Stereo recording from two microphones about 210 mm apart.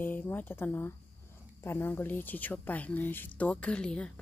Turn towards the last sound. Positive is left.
turn(degrees=5)  # may be behind; listen again after turning